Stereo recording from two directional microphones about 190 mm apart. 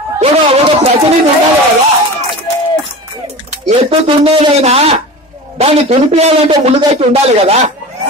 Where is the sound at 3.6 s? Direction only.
30° right (ahead or behind).